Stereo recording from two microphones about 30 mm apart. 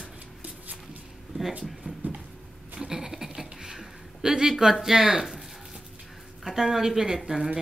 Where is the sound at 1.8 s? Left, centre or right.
Right.